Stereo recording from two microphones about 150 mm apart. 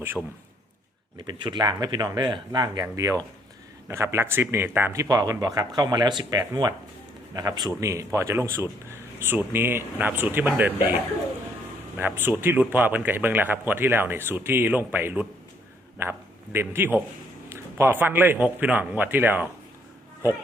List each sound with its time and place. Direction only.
1.3 s a man's voice: 30° right (ahead or behind); by 19.5 s 15° right (ahead or behind)